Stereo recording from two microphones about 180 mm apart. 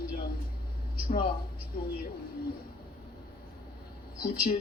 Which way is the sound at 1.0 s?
55° left (ahead or behind).